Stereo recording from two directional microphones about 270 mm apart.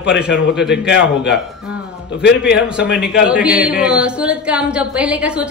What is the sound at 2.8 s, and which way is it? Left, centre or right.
A man's voice, centre.